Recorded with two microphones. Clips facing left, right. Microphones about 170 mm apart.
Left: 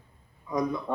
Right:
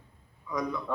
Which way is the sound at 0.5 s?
20° left (ahead or behind).